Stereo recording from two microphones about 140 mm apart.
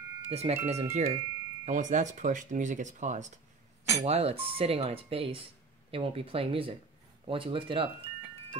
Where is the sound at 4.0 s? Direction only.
45° right (ahead or behind).